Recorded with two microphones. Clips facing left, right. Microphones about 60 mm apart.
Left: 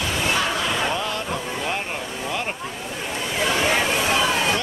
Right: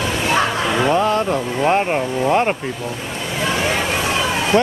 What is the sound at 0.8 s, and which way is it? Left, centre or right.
Vehicle, right.